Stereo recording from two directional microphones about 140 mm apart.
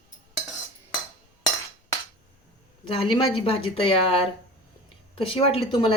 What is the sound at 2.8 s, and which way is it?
Speech, 40° left (ahead or behind).